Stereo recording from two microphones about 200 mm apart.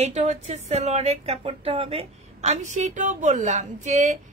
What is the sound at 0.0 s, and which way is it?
A woman's voice, 35° right (ahead or behind).